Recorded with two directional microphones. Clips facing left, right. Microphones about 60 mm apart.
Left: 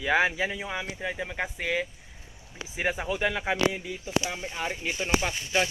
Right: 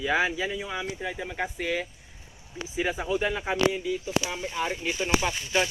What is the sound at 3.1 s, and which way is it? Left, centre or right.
Speech, left.